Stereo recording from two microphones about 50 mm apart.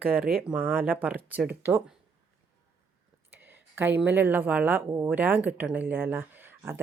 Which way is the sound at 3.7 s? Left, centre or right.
Right.